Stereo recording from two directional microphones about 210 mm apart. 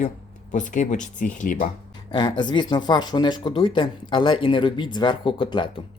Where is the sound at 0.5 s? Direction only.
35° left (ahead or behind).